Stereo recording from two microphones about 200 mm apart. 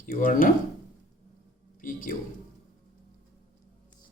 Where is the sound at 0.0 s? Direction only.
40° left (ahead or behind).